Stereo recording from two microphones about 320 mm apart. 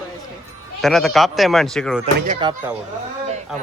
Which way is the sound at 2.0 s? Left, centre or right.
Centre.